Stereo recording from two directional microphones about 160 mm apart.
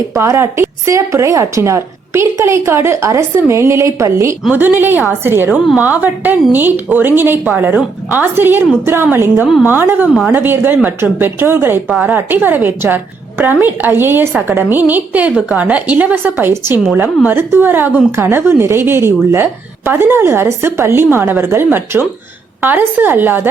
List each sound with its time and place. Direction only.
0.1 s a woman's voice: 20° right (ahead or behind)
11.9 s a woman's voice: centre (ahead or behind)
12.1 s a woman's voice: 10° right (ahead or behind)